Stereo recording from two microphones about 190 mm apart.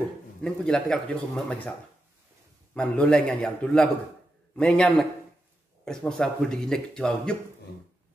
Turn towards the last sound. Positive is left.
turn(degrees=5)  # may be behind; listen again after turning